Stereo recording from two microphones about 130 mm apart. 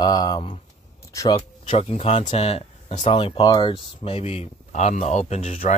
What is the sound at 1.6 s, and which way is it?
Speech, 50° left (ahead or behind).